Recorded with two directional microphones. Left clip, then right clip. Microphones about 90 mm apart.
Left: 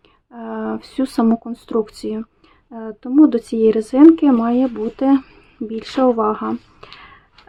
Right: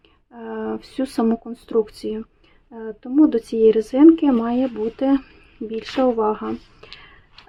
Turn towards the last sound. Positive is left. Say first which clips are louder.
# left 3 dB
turn(degrees=45)  # may be behind; listen again after turning